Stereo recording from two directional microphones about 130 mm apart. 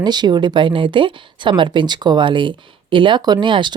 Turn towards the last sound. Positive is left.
turn(degrees=-35)  # may be behind; listen again after turning